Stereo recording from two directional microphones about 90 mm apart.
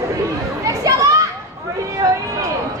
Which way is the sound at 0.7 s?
40° right (ahead or behind).